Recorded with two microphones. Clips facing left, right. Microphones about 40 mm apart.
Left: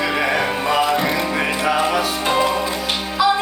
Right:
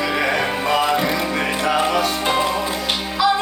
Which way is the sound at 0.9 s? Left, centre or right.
Left.